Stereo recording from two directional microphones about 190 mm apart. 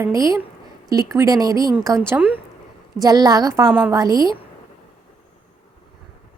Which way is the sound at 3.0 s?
20° right (ahead or behind).